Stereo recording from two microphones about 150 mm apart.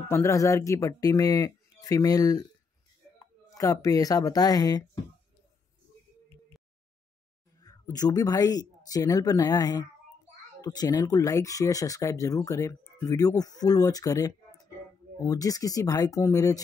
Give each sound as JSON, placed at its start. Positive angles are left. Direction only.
{"t": 0.1, "sound": "speech", "side_deg": 20}
{"t": 7.6, "sound": "speech", "side_deg": 25}